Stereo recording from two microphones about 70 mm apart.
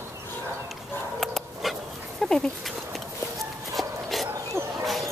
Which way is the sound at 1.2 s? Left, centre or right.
Centre.